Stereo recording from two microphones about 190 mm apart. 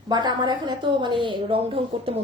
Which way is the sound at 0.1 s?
20° right (ahead or behind).